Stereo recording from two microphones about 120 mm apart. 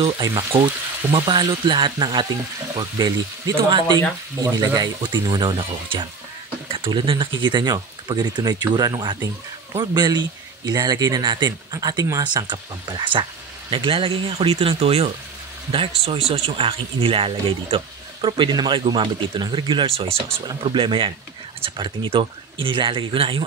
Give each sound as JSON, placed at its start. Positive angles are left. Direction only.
{"t": 0.2, "sound": "speech", "side_deg": -30}
{"t": 1.1, "sound": "speech", "side_deg": -45}